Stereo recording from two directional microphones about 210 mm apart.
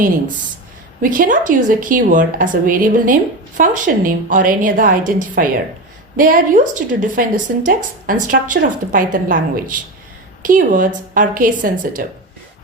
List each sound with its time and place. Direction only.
1.0 s a woman's voice: 40° right (ahead or behind)